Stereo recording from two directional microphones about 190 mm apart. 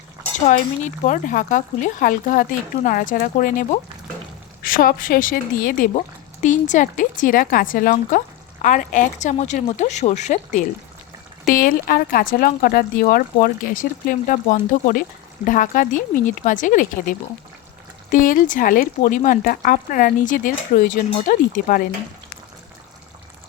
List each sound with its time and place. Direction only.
0.4 s speech: 40° left (ahead or behind)